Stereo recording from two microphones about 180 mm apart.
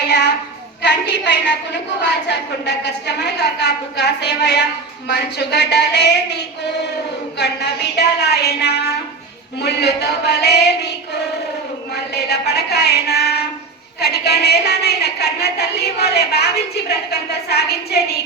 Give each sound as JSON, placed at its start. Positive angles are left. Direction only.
{"t": 0.0, "sound": "a sound", "side_deg": 70}
{"t": 0.8, "sound": "a woman's voice", "side_deg": 70}
{"t": 7.3, "sound": "a woman's voice", "side_deg": 65}
{"t": 12.1, "sound": "a woman's voice", "side_deg": 65}